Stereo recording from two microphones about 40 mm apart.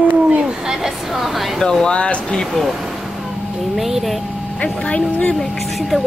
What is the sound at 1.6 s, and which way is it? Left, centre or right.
Speech, centre.